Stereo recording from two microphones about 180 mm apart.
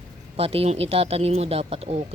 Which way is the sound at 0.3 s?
30° right (ahead or behind).